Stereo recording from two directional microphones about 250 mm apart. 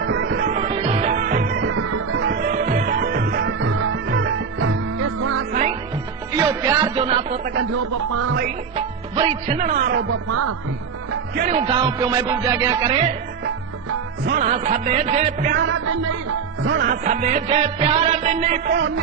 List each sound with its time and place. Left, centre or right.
0.0 s music: right
0.4 s music: right
1.6 s music: right
3.7 s music: right
5.5 s music: right
6.3 s music: centre
7.7 s a man's voice: right
8.7 s music: right
10.1 s speech: right
11.3 s music: right
14.3 s music: right
15.6 s a man's voice: right
16.6 s music: right